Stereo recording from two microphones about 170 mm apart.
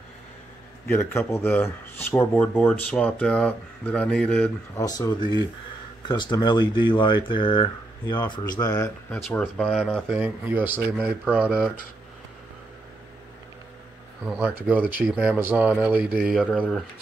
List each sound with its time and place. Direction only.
0.8 s speech: 15° left (ahead or behind)
4.7 s speech: 20° left (ahead or behind)
9.1 s speech: 10° left (ahead or behind)
14.2 s speech: 10° right (ahead or behind)
16.4 s speech: 10° left (ahead or behind)